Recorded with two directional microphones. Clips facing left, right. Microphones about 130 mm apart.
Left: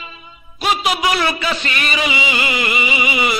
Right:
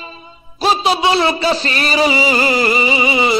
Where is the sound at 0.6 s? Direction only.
30° right (ahead or behind).